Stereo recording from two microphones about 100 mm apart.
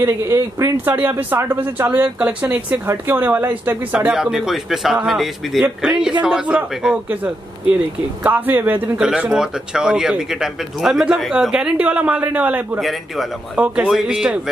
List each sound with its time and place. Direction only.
0.0 s speech: 30° right (ahead or behind)
4.2 s a man's voice: 5° right (ahead or behind)
8.2 s speech: 20° right (ahead or behind)
9.2 s speech: 5° right (ahead or behind)
12.8 s a man's voice: centre (ahead or behind)